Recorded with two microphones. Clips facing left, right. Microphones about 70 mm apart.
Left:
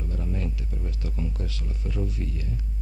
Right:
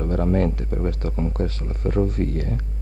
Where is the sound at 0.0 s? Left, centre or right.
Right.